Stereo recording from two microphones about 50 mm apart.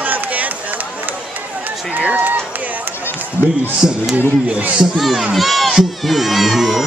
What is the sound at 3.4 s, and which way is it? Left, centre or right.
Speech, left.